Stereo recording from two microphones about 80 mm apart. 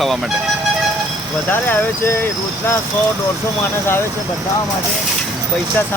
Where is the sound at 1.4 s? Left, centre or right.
Left.